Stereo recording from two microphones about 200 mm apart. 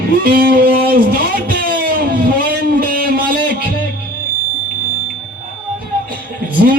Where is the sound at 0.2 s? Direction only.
50° right (ahead or behind).